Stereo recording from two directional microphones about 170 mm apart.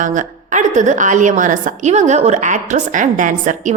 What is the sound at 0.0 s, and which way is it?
A woman's voice, 50° right (ahead or behind).